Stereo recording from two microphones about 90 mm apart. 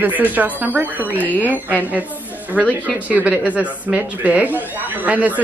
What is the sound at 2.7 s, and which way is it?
Speech, 20° right (ahead or behind).